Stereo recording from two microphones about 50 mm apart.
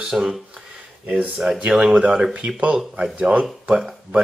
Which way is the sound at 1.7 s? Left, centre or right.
Centre.